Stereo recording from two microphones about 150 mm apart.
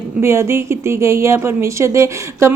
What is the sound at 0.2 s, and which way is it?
A woman's voice, 15° right (ahead or behind).